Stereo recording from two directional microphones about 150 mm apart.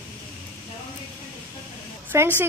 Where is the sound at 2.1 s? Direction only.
20° right (ahead or behind).